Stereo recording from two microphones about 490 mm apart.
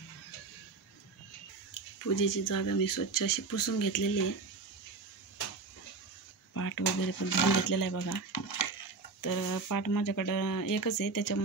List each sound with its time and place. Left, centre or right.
1.7 s speech: left
6.5 s speech: left